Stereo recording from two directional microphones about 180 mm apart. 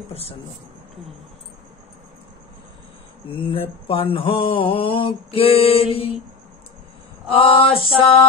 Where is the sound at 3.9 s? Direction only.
30° left (ahead or behind).